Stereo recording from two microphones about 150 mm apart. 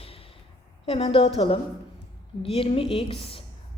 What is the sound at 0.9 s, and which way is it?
A woman's voice, 40° left (ahead or behind).